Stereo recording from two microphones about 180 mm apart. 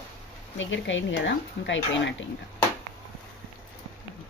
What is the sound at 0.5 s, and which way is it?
Speech, 90° left.